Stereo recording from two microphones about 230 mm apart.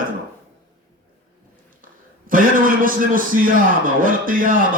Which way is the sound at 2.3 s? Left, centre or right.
Right.